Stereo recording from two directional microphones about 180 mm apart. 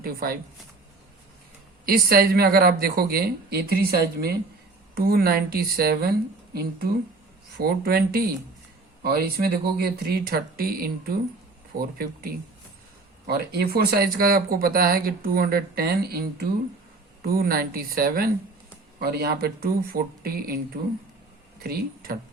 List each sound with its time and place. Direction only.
0.0 s speech: 55° right (ahead or behind)
1.9 s speech: 55° right (ahead or behind)
13.2 s speech: 55° right (ahead or behind)
21.6 s speech: 55° right (ahead or behind)